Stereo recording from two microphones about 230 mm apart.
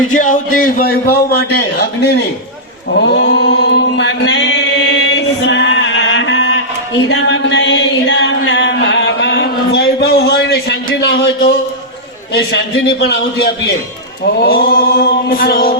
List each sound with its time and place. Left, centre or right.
0.2 s a man's voice: left
3.0 s chant: left
7.1 s a sound: left
12.3 s a man's voice: left
14.3 s male singing: left